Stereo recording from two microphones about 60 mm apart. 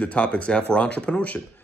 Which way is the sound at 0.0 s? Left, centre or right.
Left.